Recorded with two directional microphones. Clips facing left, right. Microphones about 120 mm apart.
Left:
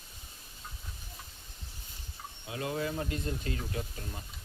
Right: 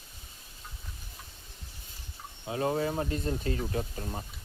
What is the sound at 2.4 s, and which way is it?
Speech, 35° right (ahead or behind).